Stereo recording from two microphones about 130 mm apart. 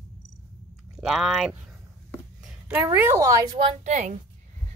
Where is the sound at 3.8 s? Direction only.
65° right (ahead or behind).